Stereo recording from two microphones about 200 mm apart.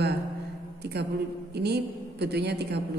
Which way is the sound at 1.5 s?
55° right (ahead or behind).